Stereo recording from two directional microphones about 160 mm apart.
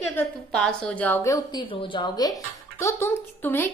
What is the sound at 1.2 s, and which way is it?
Speech, 25° left (ahead or behind).